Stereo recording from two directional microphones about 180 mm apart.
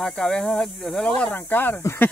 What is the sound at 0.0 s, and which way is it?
Speech, 5° left (ahead or behind).